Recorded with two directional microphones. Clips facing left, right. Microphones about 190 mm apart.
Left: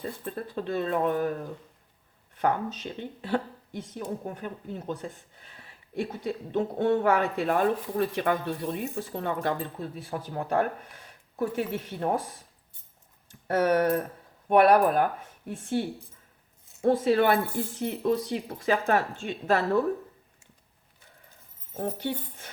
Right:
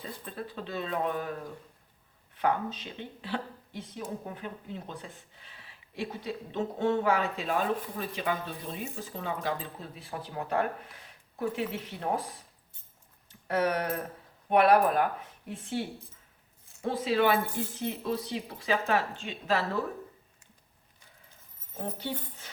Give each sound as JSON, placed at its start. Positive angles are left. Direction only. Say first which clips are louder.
{"t": 0.0, "sound": "speech", "louder": "left 5 dB", "side_deg": 50}
{"t": 2.3, "sound": "speech", "louder": "left 2 dB", "side_deg": 45}
{"t": 13.5, "sound": "speech", "louder": "left 6 dB", "side_deg": 50}
{"t": 16.8, "sound": "speech", "louder": "left 5 dB", "side_deg": 50}
{"t": 21.9, "sound": "speech", "louder": "left 4 dB", "side_deg": 55}